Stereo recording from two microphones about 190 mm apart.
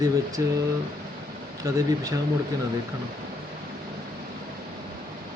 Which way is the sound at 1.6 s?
15° right (ahead or behind).